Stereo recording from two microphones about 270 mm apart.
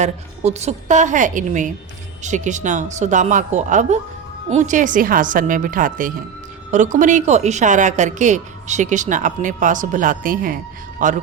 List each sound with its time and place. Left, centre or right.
0.0 s a woman's voice: right